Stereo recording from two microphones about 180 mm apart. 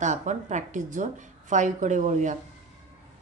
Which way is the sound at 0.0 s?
40° right (ahead or behind).